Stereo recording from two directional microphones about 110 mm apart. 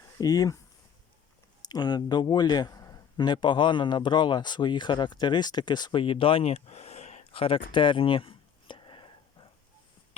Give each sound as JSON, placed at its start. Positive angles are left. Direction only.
{"t": 0.2, "sound": "speech", "side_deg": 35}
{"t": 1.6, "sound": "a man's voice", "side_deg": 40}